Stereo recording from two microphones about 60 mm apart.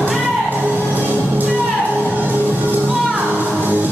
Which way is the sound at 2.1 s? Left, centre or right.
Right.